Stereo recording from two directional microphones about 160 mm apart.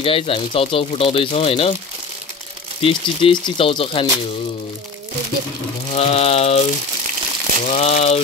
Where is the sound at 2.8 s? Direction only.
35° left (ahead or behind).